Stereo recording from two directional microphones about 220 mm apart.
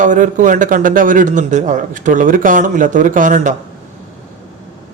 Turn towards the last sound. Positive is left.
turn(degrees=-35)  # may be behind; listen again after turning